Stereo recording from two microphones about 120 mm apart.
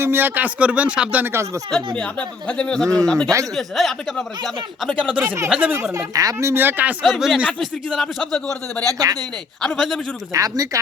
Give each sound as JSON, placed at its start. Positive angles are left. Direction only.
{"t": 0.0, "sound": "speech", "side_deg": -15}
{"t": 2.0, "sound": "speech", "side_deg": 10}
{"t": 5.0, "sound": "speech", "side_deg": -15}
{"t": 6.5, "sound": "speech", "side_deg": -15}
{"t": 7.0, "sound": "speech", "side_deg": 0}
{"t": 8.8, "sound": "speech", "side_deg": -30}
{"t": 9.6, "sound": "speech", "side_deg": 5}
{"t": 10.3, "sound": "speech", "side_deg": -30}